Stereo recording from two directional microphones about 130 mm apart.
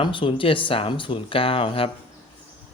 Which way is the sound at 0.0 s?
40° left (ahead or behind).